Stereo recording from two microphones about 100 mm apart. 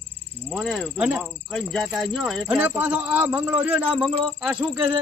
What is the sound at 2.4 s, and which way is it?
Speech, 15° right (ahead or behind).